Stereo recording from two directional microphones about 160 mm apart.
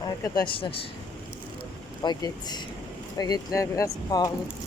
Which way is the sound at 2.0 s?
25° left (ahead or behind).